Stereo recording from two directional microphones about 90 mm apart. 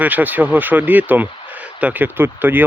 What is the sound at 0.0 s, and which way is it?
Speech, 20° right (ahead or behind).